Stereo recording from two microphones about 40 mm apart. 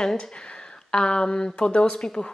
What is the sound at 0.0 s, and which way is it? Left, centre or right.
A woman's voice, centre.